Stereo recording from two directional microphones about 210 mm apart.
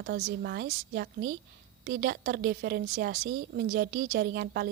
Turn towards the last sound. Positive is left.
turn(degrees=-50)  # may be behind; listen again after turning